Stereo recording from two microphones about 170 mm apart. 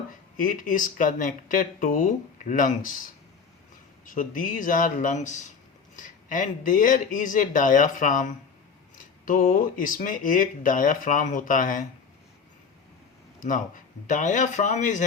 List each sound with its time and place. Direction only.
0.3 s speech: 50° left (ahead or behind)
4.0 s speech: 50° left (ahead or behind)
13.4 s speech: 50° left (ahead or behind)